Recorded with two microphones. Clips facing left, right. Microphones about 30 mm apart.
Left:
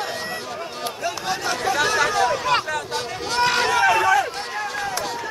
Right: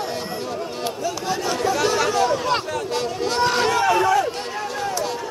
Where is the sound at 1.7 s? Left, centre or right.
Left.